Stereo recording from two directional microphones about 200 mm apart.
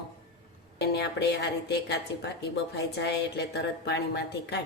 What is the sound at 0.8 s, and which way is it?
A woman's voice, 55° left (ahead or behind).